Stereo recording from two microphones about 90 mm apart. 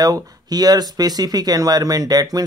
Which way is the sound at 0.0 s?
45° right (ahead or behind).